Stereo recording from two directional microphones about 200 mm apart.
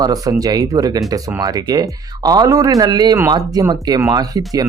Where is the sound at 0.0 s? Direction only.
20° right (ahead or behind).